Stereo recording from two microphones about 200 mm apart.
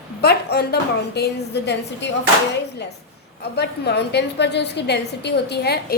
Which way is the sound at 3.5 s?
55° left (ahead or behind).